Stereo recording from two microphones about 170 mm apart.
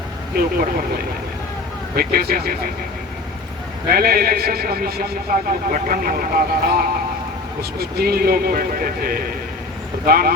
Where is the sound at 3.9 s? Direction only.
65° right (ahead or behind).